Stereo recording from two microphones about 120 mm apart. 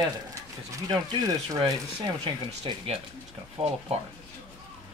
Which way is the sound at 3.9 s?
60° right (ahead or behind).